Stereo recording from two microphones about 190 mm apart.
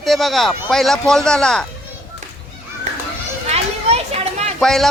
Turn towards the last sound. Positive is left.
turn(degrees=0)  # may be behind; listen again after turning